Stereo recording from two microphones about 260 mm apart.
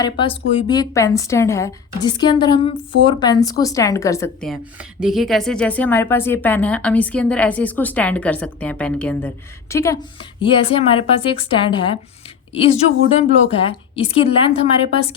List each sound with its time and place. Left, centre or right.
0.0 s a woman's voice: centre
4.4 s speech: centre
10.4 s a woman's voice: left
13.7 s a woman's voice: left